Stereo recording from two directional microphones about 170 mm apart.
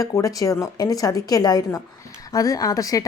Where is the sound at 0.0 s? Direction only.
20° left (ahead or behind).